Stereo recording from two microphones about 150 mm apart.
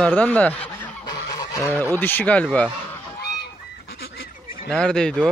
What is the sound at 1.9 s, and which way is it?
Speech, 10° left (ahead or behind).